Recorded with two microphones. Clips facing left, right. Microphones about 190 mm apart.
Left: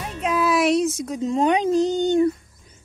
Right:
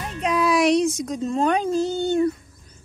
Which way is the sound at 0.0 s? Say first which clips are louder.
Even; centre (ahead or behind).